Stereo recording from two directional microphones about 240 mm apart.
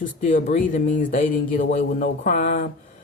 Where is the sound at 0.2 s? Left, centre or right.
Left.